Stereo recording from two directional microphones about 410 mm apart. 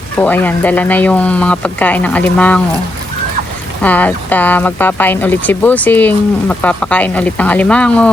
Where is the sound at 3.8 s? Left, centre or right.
Centre.